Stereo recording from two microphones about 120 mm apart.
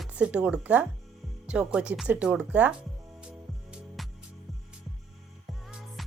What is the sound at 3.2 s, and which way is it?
Music, 5° right (ahead or behind).